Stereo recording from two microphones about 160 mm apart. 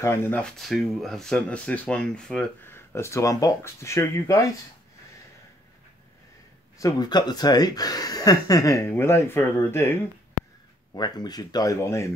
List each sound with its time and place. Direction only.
0.0 s speech: 15° left (ahead or behind)
0.6 s speech: centre (ahead or behind); by 4.5 s 20° left (ahead or behind)
6.8 s speech: 25° left (ahead or behind)
11.0 s speech: 25° left (ahead or behind)